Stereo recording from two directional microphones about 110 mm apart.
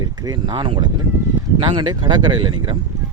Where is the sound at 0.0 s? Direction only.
35° right (ahead or behind).